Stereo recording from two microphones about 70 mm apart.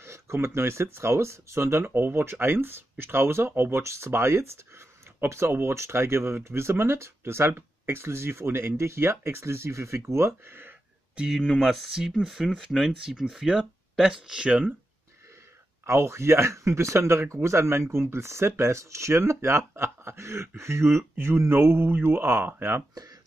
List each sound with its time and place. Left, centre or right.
0.0 s speech: right
11.1 s speech: centre
15.8 s speech: right